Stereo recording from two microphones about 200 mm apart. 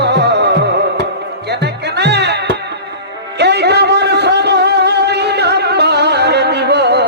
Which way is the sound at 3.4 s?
55° right (ahead or behind).